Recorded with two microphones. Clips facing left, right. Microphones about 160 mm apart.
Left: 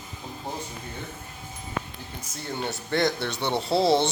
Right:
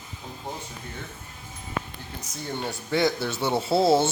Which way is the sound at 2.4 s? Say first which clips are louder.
Even; centre (ahead or behind).